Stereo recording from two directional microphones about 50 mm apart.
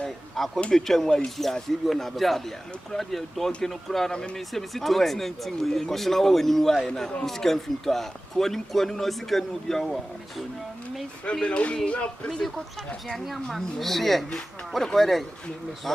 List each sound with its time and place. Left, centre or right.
0.3 s speech: centre
4.1 s speech: centre
4.4 s speech: centre
11.3 s speech: left
12.3 s speech: centre